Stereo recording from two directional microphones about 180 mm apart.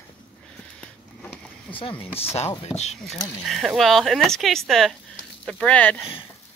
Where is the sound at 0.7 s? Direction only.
5° left (ahead or behind).